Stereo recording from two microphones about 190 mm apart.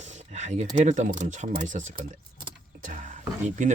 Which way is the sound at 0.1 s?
35° right (ahead or behind).